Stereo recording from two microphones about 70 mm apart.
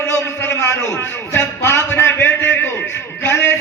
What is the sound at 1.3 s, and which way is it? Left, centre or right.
A man's voice, left.